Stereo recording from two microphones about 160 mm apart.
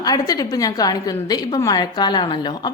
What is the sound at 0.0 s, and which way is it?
A woman's voice, 25° left (ahead or behind).